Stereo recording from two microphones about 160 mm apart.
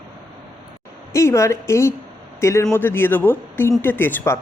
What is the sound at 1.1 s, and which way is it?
A man's voice, 20° left (ahead or behind).